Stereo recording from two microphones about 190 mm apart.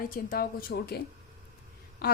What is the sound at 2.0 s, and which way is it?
Speech, 55° left (ahead or behind).